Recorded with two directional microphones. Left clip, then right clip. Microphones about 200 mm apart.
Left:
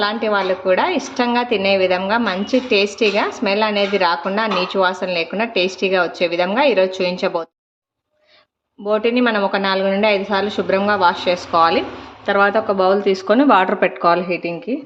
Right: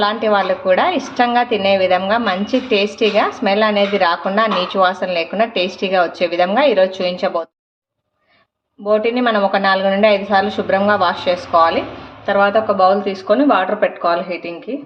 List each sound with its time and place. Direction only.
0.0 s a woman's voice: 5° left (ahead or behind)
8.9 s a woman's voice: 15° left (ahead or behind); by 14.5 s 30° left (ahead or behind)